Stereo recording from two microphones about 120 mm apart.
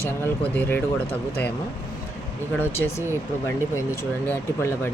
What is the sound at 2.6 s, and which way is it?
Speech, 20° left (ahead or behind).